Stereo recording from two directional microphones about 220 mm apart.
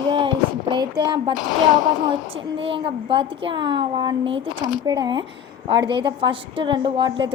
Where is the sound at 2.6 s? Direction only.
25° right (ahead or behind).